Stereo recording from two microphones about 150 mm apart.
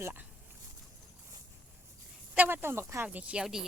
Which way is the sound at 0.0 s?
15° right (ahead or behind).